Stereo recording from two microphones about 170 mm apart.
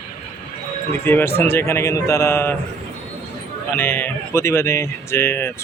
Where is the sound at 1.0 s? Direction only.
10° left (ahead or behind).